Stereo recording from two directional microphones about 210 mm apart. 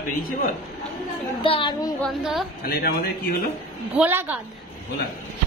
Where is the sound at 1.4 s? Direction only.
25° left (ahead or behind).